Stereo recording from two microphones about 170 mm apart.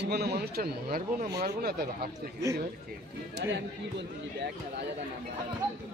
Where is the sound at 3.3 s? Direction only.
90° right.